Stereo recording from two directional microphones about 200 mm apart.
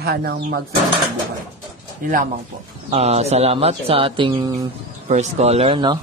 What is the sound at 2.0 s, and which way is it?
Speech, 40° right (ahead or behind).